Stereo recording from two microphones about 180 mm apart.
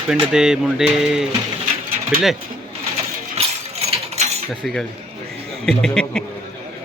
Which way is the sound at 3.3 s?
35° right (ahead or behind).